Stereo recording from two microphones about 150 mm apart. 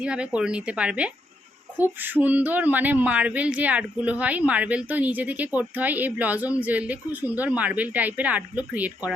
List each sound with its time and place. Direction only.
0.0 s speech: 5° right (ahead or behind)